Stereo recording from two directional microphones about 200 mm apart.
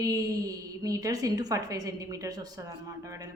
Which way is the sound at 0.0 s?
20° right (ahead or behind).